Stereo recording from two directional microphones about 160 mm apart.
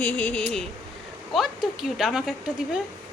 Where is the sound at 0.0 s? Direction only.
10° left (ahead or behind).